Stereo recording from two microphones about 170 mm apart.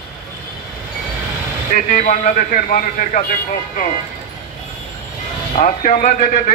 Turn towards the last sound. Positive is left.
turn(degrees=50)  # may be behind; listen again after turning